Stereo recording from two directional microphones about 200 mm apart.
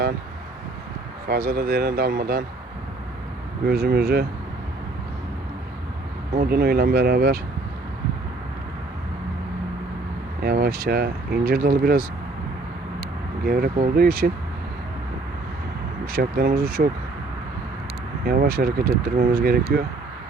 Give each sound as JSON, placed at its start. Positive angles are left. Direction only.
{"t": 1.3, "sound": "speech", "side_deg": -50}
{"t": 3.7, "sound": "speech", "side_deg": -50}
{"t": 6.3, "sound": "speech", "side_deg": -50}
{"t": 10.4, "sound": "speech", "side_deg": -50}
{"t": 16.1, "sound": "speech", "side_deg": -45}
{"t": 18.3, "sound": "speech", "side_deg": -45}